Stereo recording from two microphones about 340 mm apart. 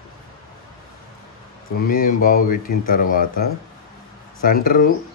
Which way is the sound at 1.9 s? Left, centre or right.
Left.